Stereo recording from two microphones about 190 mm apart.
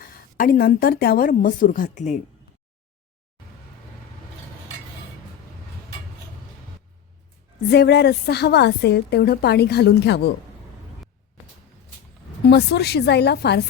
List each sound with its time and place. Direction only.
0.0 s a woman's voice: 50° left (ahead or behind)
7.7 s a woman's voice: 60° left (ahead or behind)
12.5 s a woman's voice: 60° left (ahead or behind)